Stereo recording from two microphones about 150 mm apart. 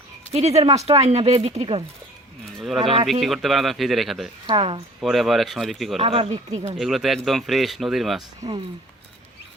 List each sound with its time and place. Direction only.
0.3 s speech: 45° right (ahead or behind)
2.6 s speech: centre (ahead or behind)
4.4 s speech: 35° right (ahead or behind)
4.9 s speech: centre (ahead or behind)
6.0 s speech: 40° right (ahead or behind)
6.7 s speech: centre (ahead or behind)
8.4 s speech: 30° right (ahead or behind)